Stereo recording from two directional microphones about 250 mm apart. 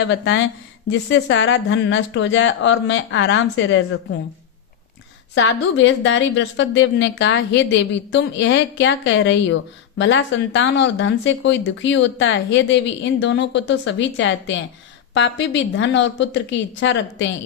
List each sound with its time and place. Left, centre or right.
0.0 s speech: left
5.3 s speech: left